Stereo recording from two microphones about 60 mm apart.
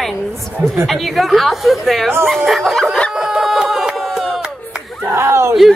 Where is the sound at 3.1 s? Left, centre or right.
Centre.